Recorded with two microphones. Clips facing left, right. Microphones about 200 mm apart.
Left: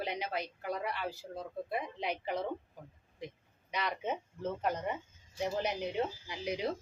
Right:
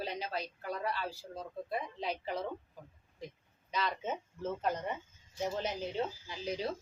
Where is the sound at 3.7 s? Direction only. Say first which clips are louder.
Even; 15° left (ahead or behind).